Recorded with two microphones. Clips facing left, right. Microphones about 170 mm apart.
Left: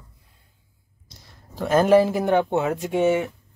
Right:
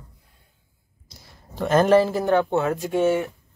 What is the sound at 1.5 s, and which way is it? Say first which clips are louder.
Speech: even; 5° left (ahead or behind).